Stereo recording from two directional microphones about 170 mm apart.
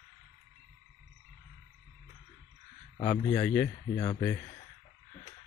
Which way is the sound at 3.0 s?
15° left (ahead or behind).